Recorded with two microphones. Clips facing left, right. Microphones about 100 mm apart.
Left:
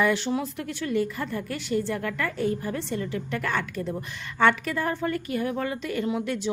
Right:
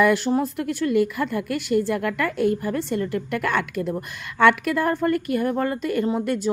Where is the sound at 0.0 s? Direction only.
45° right (ahead or behind).